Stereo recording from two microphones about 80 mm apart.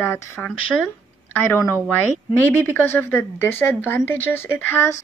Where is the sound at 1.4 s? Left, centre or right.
Left.